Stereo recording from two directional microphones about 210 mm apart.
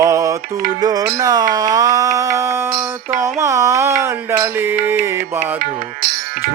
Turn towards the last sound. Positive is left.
turn(degrees=-45)  # may be behind; listen again after turning